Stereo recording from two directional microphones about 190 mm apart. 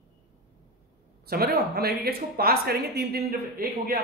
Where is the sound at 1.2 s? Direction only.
55° right (ahead or behind).